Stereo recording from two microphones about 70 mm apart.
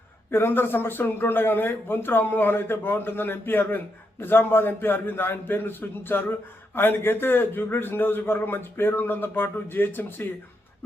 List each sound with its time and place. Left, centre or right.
0.3 s a man's voice: left